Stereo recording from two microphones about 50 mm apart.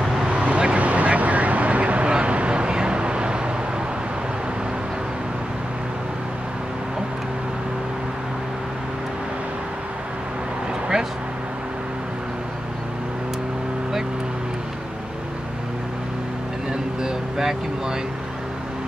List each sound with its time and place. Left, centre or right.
0.3 s vehicle: right
17.0 s vehicle: centre